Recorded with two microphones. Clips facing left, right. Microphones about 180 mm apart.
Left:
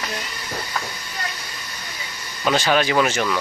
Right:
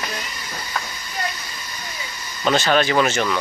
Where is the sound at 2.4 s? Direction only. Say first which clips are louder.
Right 1 dB; 10° left (ahead or behind).